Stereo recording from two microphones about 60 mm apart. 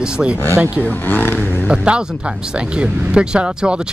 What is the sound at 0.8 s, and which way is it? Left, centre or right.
Speech, left.